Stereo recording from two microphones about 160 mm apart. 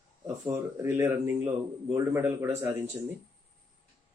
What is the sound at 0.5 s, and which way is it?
Speech, 15° right (ahead or behind).